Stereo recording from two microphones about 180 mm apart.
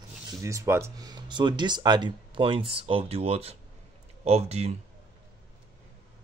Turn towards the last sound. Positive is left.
turn(degrees=-35)  # may be behind; listen again after turning